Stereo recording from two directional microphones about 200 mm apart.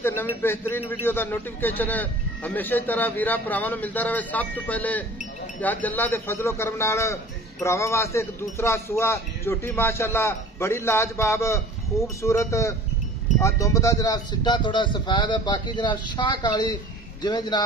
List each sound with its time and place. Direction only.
0.0 s a man's voice: 10° left (ahead or behind)